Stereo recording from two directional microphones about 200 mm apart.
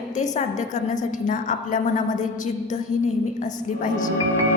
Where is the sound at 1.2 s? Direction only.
40° left (ahead or behind).